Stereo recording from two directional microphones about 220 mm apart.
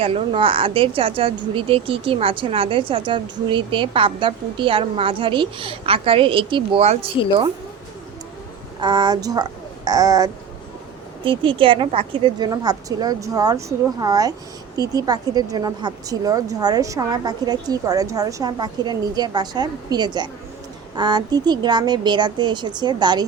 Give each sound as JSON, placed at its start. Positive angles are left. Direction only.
{"t": 0.0, "sound": "speech", "side_deg": -25}
{"t": 8.8, "sound": "a woman's voice", "side_deg": -20}